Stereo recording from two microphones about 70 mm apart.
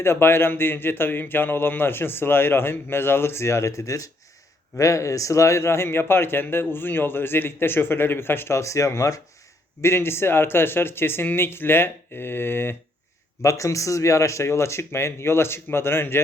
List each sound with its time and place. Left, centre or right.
0.0 s a man's voice: left
9.8 s a man's voice: left
13.4 s a man's voice: left